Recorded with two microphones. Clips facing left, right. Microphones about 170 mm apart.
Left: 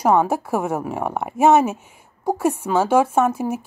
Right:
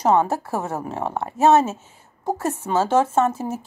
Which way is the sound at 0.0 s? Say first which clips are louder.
Left 1 dB; 10° left (ahead or behind).